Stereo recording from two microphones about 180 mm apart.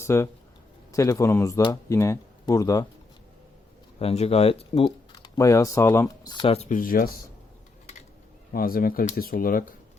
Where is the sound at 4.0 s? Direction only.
35° left (ahead or behind).